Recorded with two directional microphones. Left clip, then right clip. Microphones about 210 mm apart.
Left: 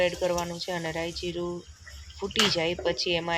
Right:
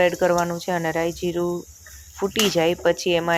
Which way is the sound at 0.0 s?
15° right (ahead or behind).